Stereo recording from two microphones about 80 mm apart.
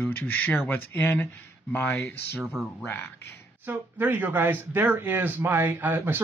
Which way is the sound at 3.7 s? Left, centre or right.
Right.